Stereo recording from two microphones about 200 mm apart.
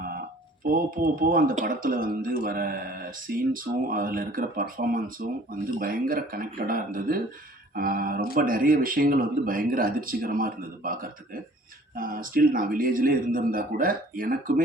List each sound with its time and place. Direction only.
0.6 s speech: 45° right (ahead or behind)